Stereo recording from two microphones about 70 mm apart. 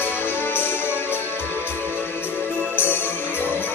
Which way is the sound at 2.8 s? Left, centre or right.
Left.